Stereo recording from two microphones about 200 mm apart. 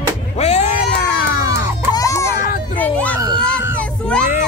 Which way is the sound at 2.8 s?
10° left (ahead or behind).